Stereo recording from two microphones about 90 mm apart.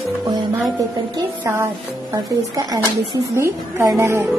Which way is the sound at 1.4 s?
30° right (ahead or behind).